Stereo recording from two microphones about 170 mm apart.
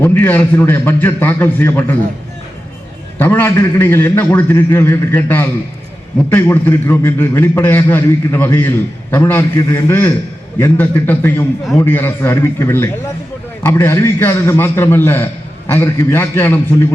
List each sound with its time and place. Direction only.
0.0 s a man's voice: 15° left (ahead or behind)
3.2 s a man's voice: 10° left (ahead or behind)